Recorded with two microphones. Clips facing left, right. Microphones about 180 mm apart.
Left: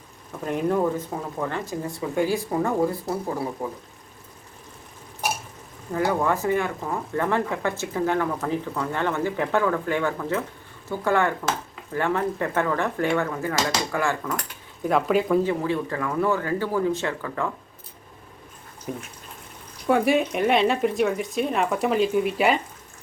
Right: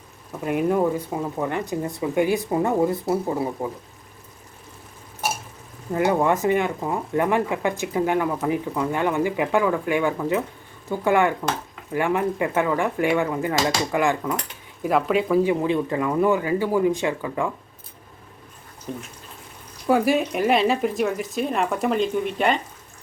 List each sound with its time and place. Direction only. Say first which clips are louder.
0.4 s speech: right 2 dB; 10° right (ahead or behind)
5.9 s speech: right 3 dB; 20° right (ahead or behind)
14.8 s speech: even; centre (ahead or behind)
15.4 s speech: right 3 dB; 20° right (ahead or behind)
18.9 s speech: even; 10° left (ahead or behind)
19.9 s speech: right 1 dB; centre (ahead or behind)